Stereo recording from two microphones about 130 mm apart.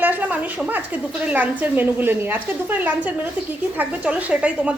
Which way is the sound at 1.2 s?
10° right (ahead or behind).